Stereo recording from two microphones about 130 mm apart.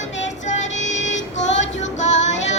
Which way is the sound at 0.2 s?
65° left (ahead or behind).